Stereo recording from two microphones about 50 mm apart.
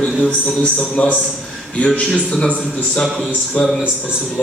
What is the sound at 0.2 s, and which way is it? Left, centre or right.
Speech, left.